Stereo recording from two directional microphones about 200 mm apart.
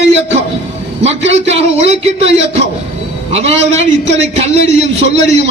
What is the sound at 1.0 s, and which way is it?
A man's voice, 30° right (ahead or behind).